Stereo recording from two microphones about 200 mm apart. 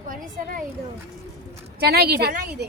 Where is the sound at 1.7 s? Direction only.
55° right (ahead or behind).